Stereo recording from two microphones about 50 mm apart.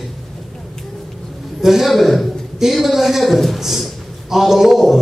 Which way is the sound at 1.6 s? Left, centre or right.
Centre.